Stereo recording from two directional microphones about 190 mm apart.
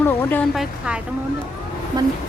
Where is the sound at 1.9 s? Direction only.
20° right (ahead or behind).